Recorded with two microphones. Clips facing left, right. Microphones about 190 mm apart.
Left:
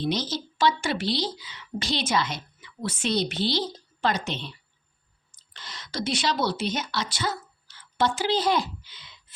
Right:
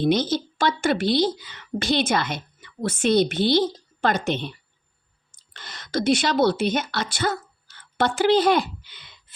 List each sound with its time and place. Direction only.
0.0 s a woman's voice: 55° right (ahead or behind)
5.5 s a woman's voice: 50° right (ahead or behind)